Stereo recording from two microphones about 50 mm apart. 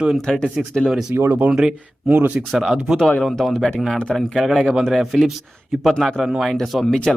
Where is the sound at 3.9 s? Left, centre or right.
Left.